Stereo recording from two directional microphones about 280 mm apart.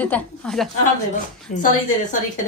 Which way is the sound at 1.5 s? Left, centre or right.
Left.